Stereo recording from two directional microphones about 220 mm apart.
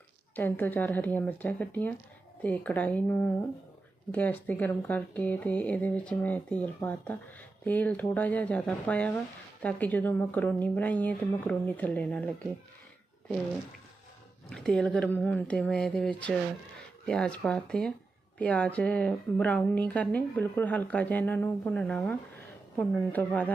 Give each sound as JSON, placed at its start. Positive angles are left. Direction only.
{"t": 0.3, "sound": "speech", "side_deg": 10}
{"t": 14.5, "sound": "speech", "side_deg": 5}